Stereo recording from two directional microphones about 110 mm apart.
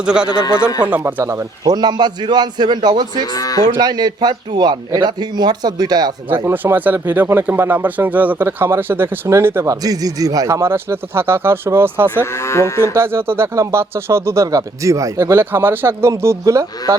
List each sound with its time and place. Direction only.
0.0 s speech: 10° right (ahead or behind)
1.2 s a man's voice: 30° right (ahead or behind)
3.3 s speech: 35° left (ahead or behind)
3.8 s a man's voice: 35° right (ahead or behind)
6.3 s speech: 20° right (ahead or behind)
9.8 s speech: 35° right (ahead or behind)
12.2 s moo: 25° left (ahead or behind)
12.9 s speech: 20° right (ahead or behind)